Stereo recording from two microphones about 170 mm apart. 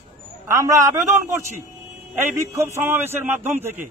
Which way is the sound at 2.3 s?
15° right (ahead or behind).